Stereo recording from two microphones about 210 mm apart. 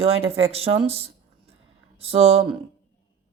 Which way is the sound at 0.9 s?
30° right (ahead or behind).